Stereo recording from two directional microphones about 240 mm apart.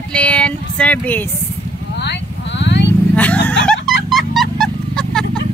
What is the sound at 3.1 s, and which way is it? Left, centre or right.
Vehicle, centre.